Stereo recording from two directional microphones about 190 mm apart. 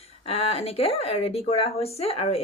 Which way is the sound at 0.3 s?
30° left (ahead or behind).